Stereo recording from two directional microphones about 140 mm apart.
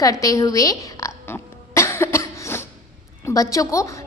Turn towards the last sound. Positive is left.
turn(degrees=20)  # may be behind; listen again after turning